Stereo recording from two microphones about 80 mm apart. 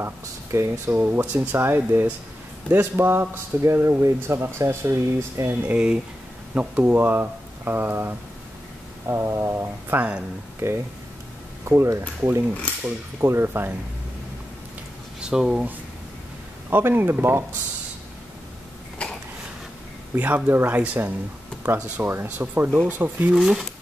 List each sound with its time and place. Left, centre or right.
0.0 s speech: right
1.2 s speech: centre; by 5.5 s right
5.7 s speech: centre; by 13.7 s right
15.1 s speech: centre
16.7 s speech: right
19.0 s a sound: centre
20.2 s speech: right
23.3 s speech: centre